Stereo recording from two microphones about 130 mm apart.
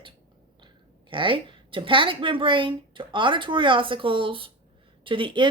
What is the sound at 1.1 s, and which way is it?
Speech, 40° right (ahead or behind).